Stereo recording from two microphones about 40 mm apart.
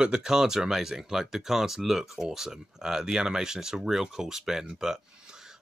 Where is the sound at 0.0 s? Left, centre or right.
Centre.